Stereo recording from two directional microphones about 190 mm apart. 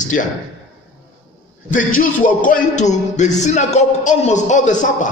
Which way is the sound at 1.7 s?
45° left (ahead or behind).